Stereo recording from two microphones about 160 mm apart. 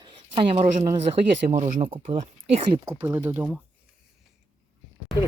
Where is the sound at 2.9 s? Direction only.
15° right (ahead or behind).